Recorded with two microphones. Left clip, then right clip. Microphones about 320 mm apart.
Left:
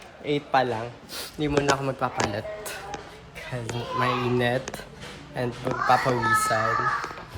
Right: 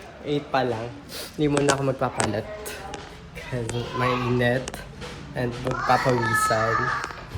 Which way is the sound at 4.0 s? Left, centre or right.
Centre.